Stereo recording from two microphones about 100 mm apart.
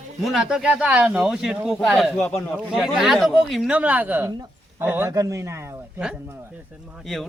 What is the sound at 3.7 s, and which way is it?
A man's voice, 15° right (ahead or behind).